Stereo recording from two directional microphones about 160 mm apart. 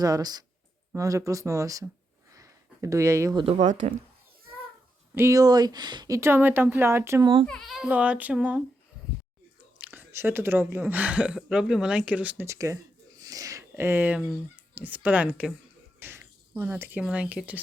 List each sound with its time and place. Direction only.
0.0 s speech: 25° right (ahead or behind)
2.3 s a sound: 20° right (ahead or behind)
3.3 s speech: 30° right (ahead or behind)
3.7 s speech: 50° right (ahead or behind)
5.1 s speech: 20° right (ahead or behind)
7.4 s speech: 5° left (ahead or behind)
9.7 s speech: 10° right (ahead or behind)
16.0 s a sound: 15° right (ahead or behind)
17.0 s speech: 5° right (ahead or behind)